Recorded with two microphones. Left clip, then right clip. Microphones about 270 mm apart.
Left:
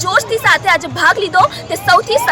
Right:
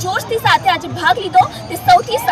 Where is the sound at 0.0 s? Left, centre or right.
Centre.